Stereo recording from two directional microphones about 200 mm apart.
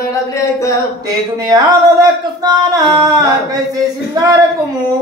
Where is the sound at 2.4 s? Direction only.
20° right (ahead or behind).